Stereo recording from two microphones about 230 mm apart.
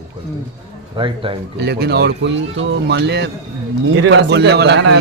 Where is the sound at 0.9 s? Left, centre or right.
Right.